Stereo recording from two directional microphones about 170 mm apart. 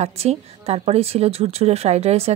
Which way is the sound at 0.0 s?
40° right (ahead or behind).